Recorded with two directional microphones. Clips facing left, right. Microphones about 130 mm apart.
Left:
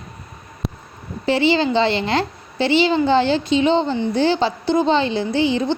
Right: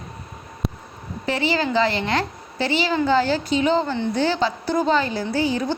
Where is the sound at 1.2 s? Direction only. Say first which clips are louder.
Left 5 dB; 30° left (ahead or behind).